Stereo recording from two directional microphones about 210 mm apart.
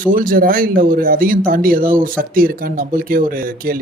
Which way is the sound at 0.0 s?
40° right (ahead or behind).